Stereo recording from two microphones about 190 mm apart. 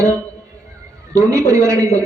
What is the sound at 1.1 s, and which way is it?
Speech, 15° right (ahead or behind).